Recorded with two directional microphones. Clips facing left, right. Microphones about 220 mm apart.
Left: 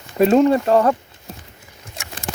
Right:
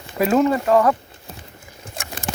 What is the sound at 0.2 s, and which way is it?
Speech, 30° left (ahead or behind).